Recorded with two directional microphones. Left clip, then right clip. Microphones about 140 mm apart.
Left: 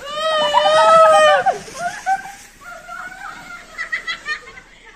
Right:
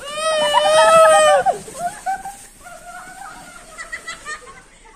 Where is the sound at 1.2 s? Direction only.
45° right (ahead or behind).